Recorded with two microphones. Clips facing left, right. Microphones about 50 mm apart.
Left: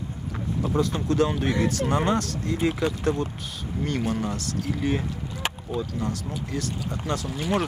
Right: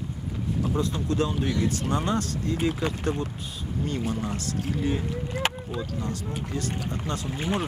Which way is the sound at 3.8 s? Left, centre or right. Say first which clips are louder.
Left 3 dB; left.